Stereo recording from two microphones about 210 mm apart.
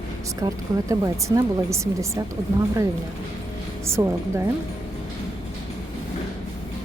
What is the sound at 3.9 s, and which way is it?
Speech, 10° right (ahead or behind).